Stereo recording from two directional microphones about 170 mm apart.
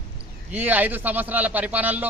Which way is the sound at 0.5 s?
10° right (ahead or behind).